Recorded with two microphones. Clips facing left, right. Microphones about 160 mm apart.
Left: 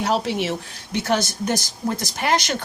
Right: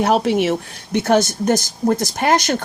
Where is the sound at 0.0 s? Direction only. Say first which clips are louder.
Right 6 dB; 55° right (ahead or behind).